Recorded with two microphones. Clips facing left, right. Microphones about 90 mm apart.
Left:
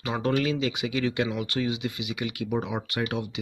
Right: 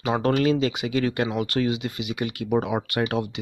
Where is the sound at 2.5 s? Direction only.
60° right (ahead or behind).